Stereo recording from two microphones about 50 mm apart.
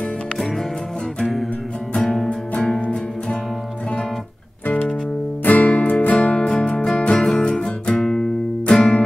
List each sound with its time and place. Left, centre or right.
2.0 s music: centre
2.8 s music: left
5.5 s music: left
6.1 s music: centre
7.2 s music: centre